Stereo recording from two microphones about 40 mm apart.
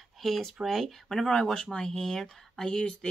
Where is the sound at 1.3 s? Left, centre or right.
Left.